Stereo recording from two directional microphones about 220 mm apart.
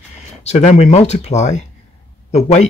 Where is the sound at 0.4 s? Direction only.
30° left (ahead or behind).